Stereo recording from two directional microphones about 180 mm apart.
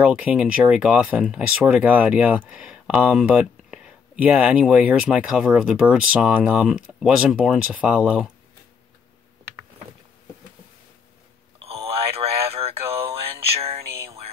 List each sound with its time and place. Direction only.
0.0 s speech: 5° right (ahead or behind)
11.6 s radio: 35° right (ahead or behind)